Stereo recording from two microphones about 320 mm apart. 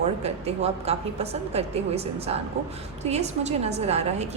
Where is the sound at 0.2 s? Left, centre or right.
Centre.